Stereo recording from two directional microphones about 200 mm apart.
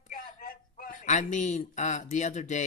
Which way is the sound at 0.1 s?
45° left (ahead or behind).